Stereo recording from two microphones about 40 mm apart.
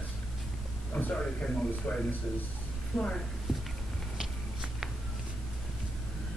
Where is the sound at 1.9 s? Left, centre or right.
Left.